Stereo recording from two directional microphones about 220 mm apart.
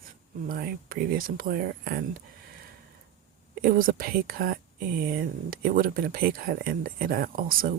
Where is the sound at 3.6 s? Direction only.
40° right (ahead or behind).